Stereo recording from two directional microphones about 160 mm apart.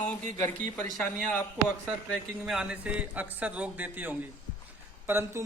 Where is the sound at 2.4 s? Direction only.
5° right (ahead or behind).